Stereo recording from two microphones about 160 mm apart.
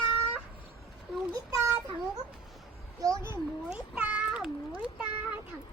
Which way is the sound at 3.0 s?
20° right (ahead or behind).